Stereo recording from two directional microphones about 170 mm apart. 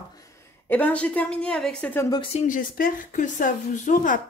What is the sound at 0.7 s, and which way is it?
A woman's voice, 10° left (ahead or behind).